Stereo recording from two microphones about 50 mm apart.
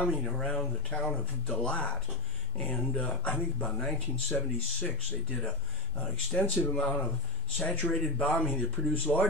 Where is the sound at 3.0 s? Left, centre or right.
Left.